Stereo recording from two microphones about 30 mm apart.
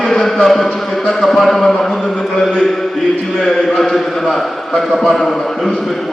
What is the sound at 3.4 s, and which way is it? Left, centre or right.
Speech, centre.